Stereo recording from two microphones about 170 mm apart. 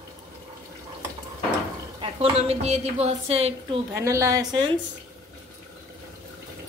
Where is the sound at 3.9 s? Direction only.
15° right (ahead or behind).